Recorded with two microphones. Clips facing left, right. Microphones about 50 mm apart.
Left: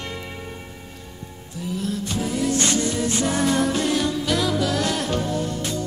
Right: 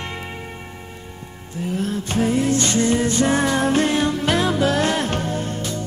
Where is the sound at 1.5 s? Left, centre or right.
Right.